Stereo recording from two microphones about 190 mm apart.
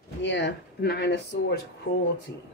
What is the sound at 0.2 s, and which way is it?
Speech, 70° left (ahead or behind).